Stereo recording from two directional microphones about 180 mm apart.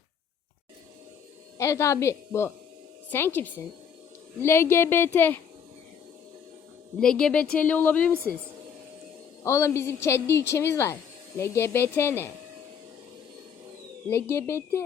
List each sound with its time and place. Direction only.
1.5 s speech: 15° left (ahead or behind)
7.0 s speech: 5° left (ahead or behind)
9.4 s speech: 15° left (ahead or behind)
14.1 s speech: 10° left (ahead or behind)